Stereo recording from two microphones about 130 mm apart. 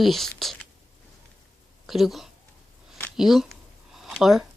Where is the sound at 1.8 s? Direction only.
Centre (ahead or behind).